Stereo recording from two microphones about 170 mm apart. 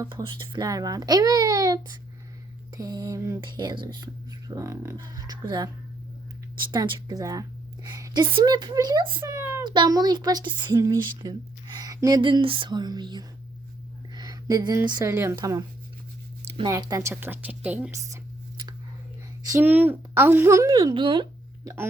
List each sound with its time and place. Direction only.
0.0 s speech: 25° right (ahead or behind)
3.4 s speech: 25° right (ahead or behind)
9.2 s a sound: 15° right (ahead or behind)
9.6 s speech: 25° right (ahead or behind)
14.1 s a sound: 25° right (ahead or behind)
15.1 s a woman's voice: 15° right (ahead or behind)
16.6 s a woman's voice: 20° right (ahead or behind)